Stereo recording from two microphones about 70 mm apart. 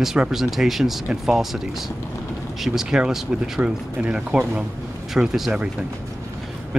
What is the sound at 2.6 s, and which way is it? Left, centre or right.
Speech, centre.